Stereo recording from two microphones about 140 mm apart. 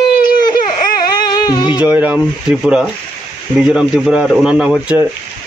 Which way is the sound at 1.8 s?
10° right (ahead or behind).